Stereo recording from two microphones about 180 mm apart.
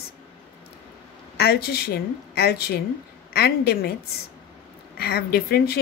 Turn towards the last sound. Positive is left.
turn(degrees=60)  # may be behind; listen again after turning